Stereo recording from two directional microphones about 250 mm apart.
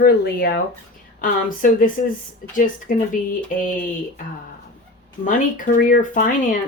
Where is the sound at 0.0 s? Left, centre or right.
Left.